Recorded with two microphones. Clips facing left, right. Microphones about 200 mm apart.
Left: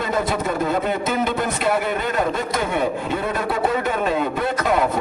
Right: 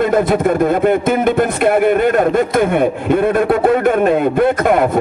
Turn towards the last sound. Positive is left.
turn(degrees=-55)  # may be behind; listen again after turning